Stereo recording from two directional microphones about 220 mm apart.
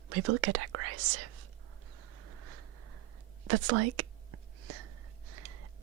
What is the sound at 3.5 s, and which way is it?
Speech, 90° right.